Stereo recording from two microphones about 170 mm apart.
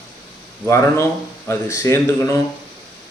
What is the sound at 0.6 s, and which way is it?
Speech, 15° left (ahead or behind).